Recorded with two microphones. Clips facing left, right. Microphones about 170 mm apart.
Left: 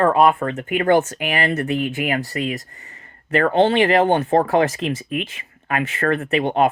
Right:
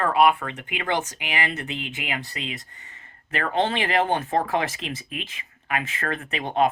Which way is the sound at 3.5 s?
35° left (ahead or behind).